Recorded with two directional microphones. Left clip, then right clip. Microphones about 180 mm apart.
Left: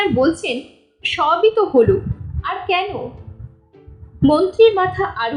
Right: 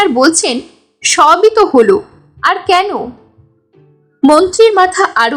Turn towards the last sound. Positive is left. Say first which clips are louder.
# right 10 dB
turn(degrees=-35)  # may be behind; listen again after turning